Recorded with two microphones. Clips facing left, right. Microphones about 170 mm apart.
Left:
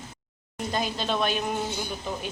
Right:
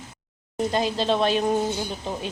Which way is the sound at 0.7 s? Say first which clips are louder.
Right 4 dB; 30° right (ahead or behind).